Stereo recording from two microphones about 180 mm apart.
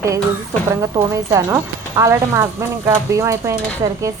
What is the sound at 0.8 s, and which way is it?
Speech, 20° right (ahead or behind).